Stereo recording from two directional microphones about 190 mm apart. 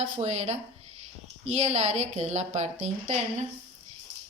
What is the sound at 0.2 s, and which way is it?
Speech, 35° right (ahead or behind).